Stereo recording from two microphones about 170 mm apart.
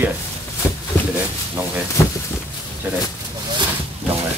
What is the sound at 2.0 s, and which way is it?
Speech, 15° left (ahead or behind).